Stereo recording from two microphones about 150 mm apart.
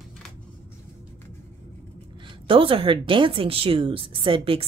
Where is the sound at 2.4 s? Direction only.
35° right (ahead or behind).